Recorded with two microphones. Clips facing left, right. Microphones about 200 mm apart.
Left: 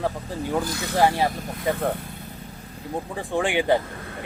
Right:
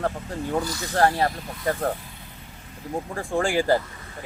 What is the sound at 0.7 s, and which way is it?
Speech, 60° left (ahead or behind).